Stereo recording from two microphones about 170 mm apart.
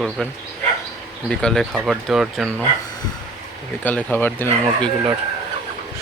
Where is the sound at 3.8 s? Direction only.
10° left (ahead or behind).